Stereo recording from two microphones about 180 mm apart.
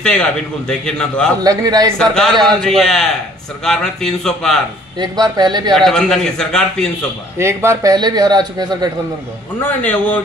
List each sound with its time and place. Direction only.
0.0 s a man's voice: 5° left (ahead or behind)
1.4 s a man's voice: 20° right (ahead or behind)
2.0 s a man's voice: 5° left (ahead or behind)
4.9 s a man's voice: 20° right (ahead or behind)
5.8 s a man's voice: 5° left (ahead or behind)
7.3 s a man's voice: 15° right (ahead or behind)
9.6 s speech: 10° left (ahead or behind)